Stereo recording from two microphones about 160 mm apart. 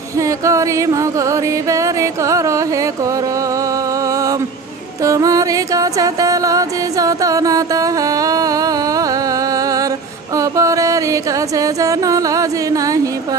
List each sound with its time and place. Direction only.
0.2 s music: 20° right (ahead or behind)
4.1 s a sound: 20° right (ahead or behind)
5.0 s music: 20° right (ahead or behind)